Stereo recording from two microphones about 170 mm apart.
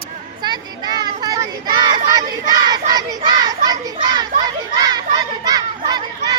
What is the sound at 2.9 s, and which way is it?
Children playing, 25° right (ahead or behind).